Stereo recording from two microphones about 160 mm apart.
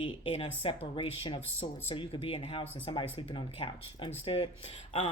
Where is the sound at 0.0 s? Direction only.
35° left (ahead or behind).